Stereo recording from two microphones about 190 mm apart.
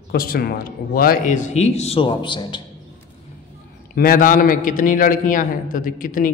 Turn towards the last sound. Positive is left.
turn(degrees=45)  # may be behind; listen again after turning